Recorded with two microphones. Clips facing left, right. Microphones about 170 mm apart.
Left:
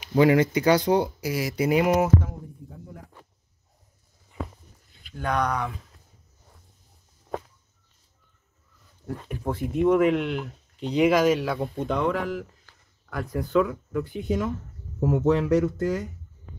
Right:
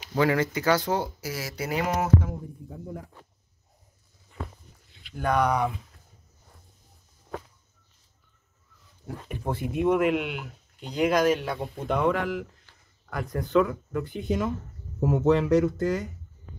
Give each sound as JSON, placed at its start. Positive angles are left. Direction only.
{"t": 0.0, "sound": "speech", "side_deg": 15}
{"t": 5.1, "sound": "speech", "side_deg": -5}
{"t": 9.0, "sound": "speech", "side_deg": 0}